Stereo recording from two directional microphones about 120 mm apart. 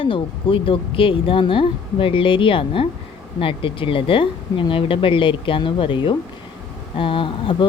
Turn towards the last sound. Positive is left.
turn(degrees=45)  # may be behind; listen again after turning